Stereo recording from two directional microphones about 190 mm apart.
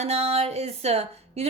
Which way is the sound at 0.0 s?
35° right (ahead or behind).